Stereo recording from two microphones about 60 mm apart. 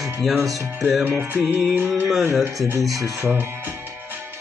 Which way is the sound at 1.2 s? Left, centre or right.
Right.